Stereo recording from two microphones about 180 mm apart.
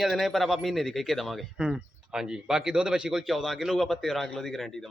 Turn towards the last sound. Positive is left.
turn(degrees=0)  # may be behind; listen again after turning